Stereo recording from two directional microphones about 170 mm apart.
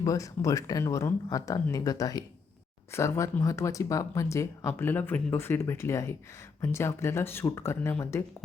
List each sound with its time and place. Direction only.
0.0 s speech: 20° left (ahead or behind)